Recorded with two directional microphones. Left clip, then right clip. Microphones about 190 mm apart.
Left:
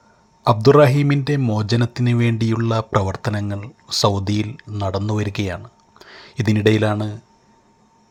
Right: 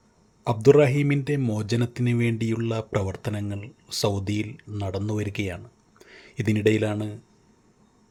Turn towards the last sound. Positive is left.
turn(degrees=0)  # may be behind; listen again after turning